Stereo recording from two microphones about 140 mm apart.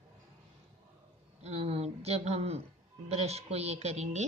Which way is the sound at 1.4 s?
45° right (ahead or behind).